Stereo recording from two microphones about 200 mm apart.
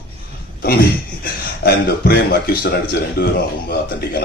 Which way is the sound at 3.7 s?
50° left (ahead or behind).